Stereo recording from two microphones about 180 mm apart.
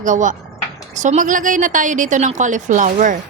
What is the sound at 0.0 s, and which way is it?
Speech, 45° right (ahead or behind).